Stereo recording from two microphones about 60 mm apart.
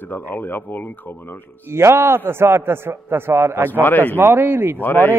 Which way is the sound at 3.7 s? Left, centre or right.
Left.